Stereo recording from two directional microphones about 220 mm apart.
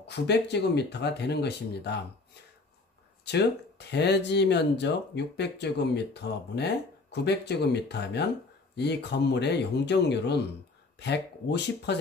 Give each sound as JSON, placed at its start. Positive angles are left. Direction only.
{"t": 0.0, "sound": "speech", "side_deg": 50}
{"t": 3.3, "sound": "speech", "side_deg": 50}